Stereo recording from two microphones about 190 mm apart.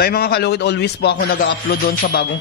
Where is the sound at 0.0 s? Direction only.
55° left (ahead or behind).